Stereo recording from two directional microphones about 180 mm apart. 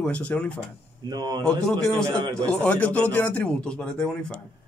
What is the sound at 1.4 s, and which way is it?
Speech, 5° left (ahead or behind).